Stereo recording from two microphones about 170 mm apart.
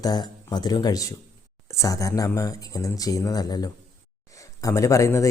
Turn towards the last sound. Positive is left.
turn(degrees=20)  # may be behind; listen again after turning